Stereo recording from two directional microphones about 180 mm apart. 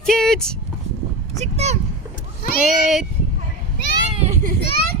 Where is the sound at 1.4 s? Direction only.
40° right (ahead or behind).